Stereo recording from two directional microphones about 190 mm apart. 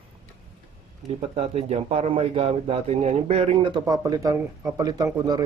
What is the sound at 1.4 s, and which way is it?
Speech, 35° right (ahead or behind).